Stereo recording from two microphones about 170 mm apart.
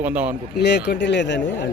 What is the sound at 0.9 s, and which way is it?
Speech, 90° left.